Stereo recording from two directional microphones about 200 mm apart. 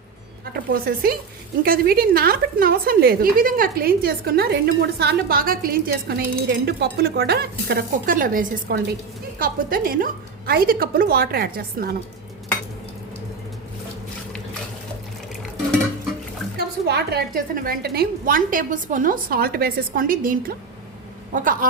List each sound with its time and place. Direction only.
0.7 s a woman's voice: 50° right (ahead or behind)
16.6 s a woman's voice: 55° right (ahead or behind)